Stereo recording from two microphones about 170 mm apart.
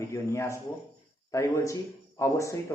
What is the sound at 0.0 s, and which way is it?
A man's voice, 15° left (ahead or behind).